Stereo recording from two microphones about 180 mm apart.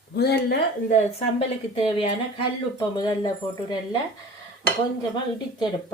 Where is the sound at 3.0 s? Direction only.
20° left (ahead or behind).